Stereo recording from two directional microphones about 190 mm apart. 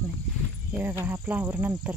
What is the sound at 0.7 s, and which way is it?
Speech, 10° right (ahead or behind).